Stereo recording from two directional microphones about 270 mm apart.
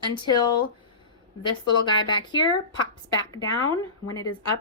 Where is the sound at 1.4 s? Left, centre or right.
Centre.